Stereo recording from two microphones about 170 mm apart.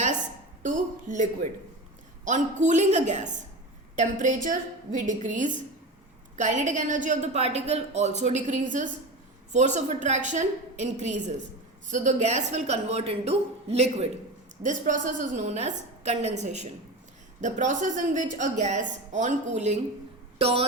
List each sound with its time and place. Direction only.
0.6 s a woman's voice: 50° right (ahead or behind)